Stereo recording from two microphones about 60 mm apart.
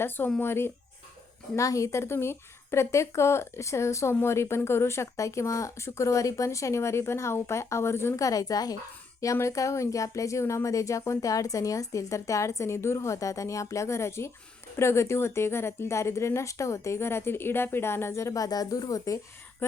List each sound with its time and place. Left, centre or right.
0.3 s speech: left
1.5 s speech: left
8.2 s a woman's voice: left
9.2 s speech: left